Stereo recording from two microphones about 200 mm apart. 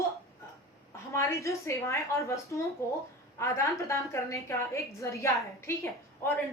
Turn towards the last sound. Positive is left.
turn(degrees=15)  # may be behind; listen again after turning